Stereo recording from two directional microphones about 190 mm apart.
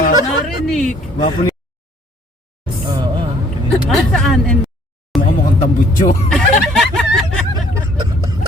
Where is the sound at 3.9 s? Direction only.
Centre (ahead or behind).